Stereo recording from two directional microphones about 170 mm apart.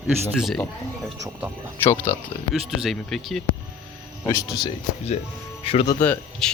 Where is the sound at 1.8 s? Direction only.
15° left (ahead or behind).